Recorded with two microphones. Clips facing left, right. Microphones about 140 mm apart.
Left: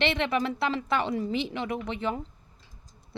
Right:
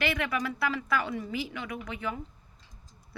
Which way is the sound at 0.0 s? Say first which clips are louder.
Left 4 dB; 25° left (ahead or behind).